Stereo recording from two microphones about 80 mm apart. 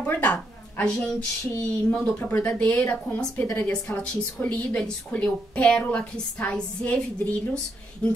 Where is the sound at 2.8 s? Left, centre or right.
Left.